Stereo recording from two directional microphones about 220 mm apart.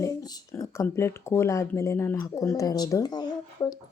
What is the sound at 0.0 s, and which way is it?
Speech, 15° left (ahead or behind).